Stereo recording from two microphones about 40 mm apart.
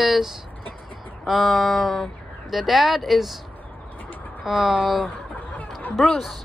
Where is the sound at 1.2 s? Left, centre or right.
Centre.